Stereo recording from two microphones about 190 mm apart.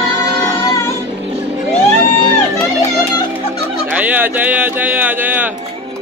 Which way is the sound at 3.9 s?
10° right (ahead or behind).